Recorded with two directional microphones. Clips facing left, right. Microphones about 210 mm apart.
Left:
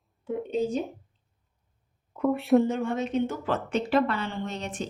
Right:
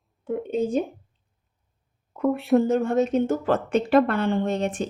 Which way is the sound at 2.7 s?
45° right (ahead or behind).